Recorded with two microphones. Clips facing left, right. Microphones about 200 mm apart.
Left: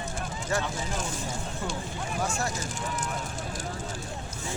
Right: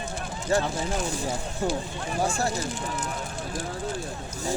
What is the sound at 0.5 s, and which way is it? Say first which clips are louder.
Speech: right 6 dB; 30° right (ahead or behind).